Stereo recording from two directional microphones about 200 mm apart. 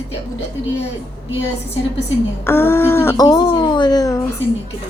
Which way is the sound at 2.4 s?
10° left (ahead or behind).